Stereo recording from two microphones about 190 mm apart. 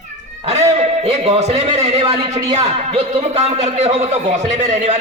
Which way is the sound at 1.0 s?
35° right (ahead or behind).